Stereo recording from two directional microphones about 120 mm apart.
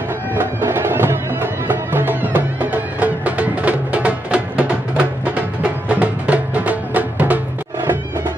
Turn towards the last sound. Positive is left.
turn(degrees=-15)  # may be behind; listen again after turning